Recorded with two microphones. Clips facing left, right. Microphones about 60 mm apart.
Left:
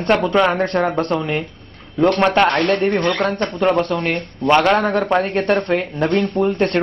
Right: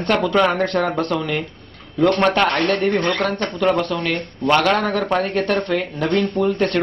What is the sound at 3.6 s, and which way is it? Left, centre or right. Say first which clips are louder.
Speech: left 2 dB; left.